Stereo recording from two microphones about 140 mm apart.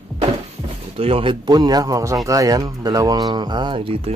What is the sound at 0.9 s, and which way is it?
Speech, 45° right (ahead or behind).